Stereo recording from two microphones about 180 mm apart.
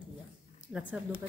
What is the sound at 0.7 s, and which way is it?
Speech, 5° right (ahead or behind).